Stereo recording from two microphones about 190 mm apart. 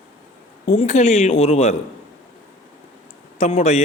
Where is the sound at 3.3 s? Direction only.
35° left (ahead or behind).